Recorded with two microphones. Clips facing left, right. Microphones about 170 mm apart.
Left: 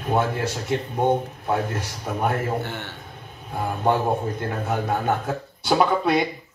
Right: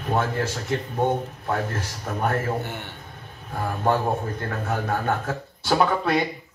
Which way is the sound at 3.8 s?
20° left (ahead or behind).